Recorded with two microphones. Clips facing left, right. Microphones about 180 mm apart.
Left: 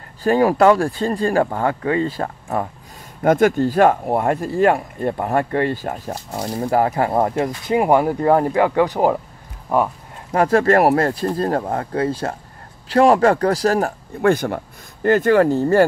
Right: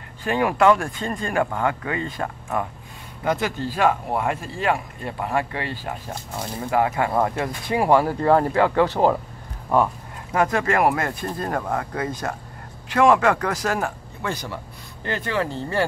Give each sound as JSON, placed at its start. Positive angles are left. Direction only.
{"t": 0.2, "sound": "speech", "side_deg": 35}
{"t": 3.2, "sound": "speech", "side_deg": 50}
{"t": 6.3, "sound": "speech", "side_deg": 30}
{"t": 10.3, "sound": "speech", "side_deg": 35}
{"t": 14.2, "sound": "speech", "side_deg": 55}